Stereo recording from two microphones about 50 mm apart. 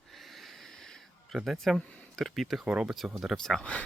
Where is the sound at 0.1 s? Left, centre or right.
Centre.